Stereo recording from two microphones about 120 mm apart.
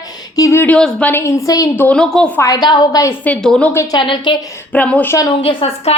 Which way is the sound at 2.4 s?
30° left (ahead or behind).